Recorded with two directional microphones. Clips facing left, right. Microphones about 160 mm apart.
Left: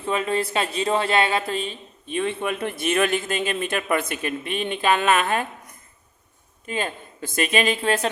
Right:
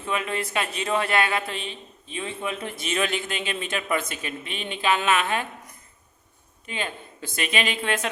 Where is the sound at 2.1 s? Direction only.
60° left (ahead or behind).